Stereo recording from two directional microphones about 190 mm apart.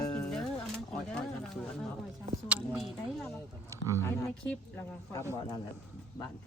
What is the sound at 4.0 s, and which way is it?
Speech, 10° left (ahead or behind).